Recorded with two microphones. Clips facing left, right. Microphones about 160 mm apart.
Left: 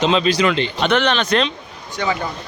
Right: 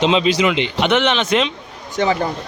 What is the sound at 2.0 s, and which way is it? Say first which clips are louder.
Speech: right 4 dB; 30° right (ahead or behind).